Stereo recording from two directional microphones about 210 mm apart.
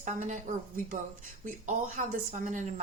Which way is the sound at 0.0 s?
35° right (ahead or behind).